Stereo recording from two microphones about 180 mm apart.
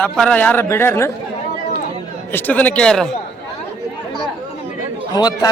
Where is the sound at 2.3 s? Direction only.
10° left (ahead or behind).